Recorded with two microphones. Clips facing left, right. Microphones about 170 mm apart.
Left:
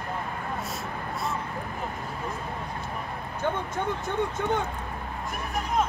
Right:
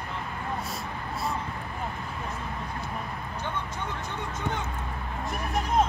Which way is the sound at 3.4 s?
55° left (ahead or behind).